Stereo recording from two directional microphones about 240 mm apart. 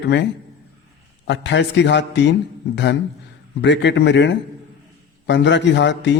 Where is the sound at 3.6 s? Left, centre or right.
Left.